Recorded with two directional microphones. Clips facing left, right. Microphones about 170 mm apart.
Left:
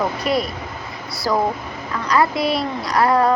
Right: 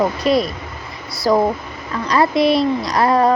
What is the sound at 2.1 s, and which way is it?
A child's voice, 20° right (ahead or behind).